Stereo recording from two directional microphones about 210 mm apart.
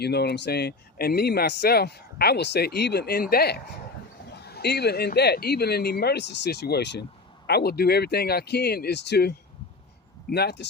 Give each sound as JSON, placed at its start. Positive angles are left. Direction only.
{"t": 0.0, "sound": "speech", "side_deg": 50}